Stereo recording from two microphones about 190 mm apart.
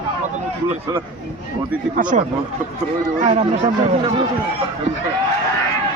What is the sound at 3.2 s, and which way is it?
Speech, 35° right (ahead or behind).